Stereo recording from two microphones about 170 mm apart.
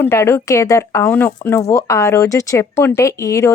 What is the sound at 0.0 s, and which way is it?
A woman's voice, 15° left (ahead or behind).